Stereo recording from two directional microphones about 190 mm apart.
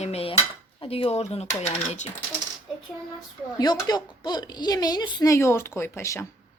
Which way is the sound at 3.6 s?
20° left (ahead or behind).